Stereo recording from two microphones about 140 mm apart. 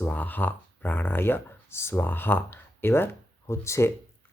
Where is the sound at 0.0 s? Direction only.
10° left (ahead or behind).